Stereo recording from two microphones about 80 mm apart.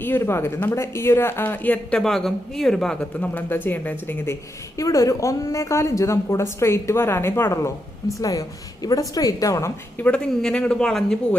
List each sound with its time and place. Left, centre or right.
0.0 s speech: left
2.0 s speech: centre
3.2 s speech: left
4.8 s a woman's voice: left
8.2 s a woman's voice: left
10.0 s speech: centre